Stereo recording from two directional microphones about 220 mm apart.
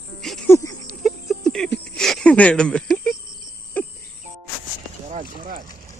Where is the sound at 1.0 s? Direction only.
Centre (ahead or behind).